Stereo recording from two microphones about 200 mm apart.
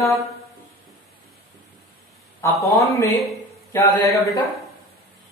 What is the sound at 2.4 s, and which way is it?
Speech, 15° left (ahead or behind).